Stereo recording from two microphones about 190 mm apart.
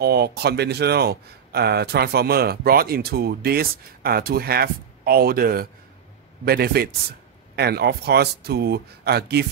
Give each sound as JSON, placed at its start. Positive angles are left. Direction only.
{"t": 0.0, "sound": "speech", "side_deg": -55}